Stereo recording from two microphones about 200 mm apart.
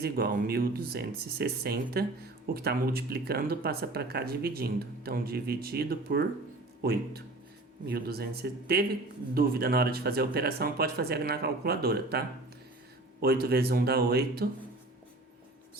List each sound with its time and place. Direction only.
0.0 s speech: 50° right (ahead or behind)